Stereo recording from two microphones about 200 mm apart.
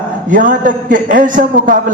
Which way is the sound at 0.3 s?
40° right (ahead or behind).